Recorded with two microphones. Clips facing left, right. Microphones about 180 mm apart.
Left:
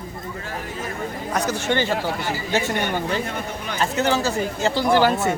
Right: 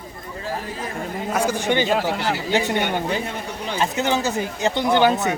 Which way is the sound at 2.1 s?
80° right.